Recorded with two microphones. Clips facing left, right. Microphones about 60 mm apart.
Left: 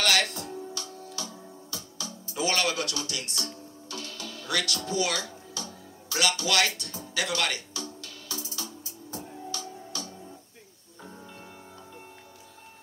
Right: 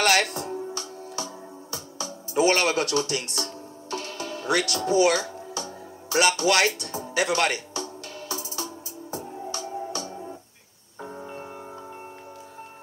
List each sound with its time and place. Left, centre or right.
0.0 s music: right